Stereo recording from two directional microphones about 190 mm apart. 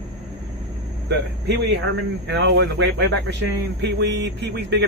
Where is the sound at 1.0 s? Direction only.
65° right (ahead or behind).